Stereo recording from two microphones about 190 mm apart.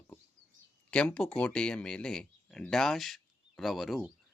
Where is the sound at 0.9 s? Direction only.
5° left (ahead or behind).